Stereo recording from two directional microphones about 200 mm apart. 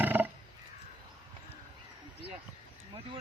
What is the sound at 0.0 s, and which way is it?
Wild animals, 10° right (ahead or behind).